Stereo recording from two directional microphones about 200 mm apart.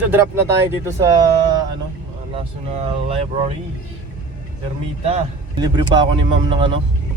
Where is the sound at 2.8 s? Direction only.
30° right (ahead or behind).